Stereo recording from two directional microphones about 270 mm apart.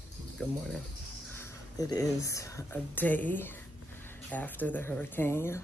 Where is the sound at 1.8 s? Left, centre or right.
Centre.